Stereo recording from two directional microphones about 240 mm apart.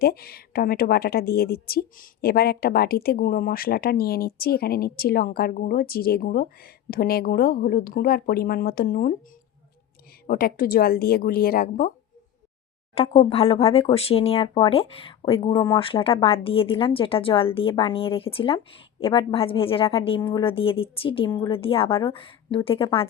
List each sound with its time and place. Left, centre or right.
0.0 s speech: left
10.2 s speech: left
12.9 s speech: left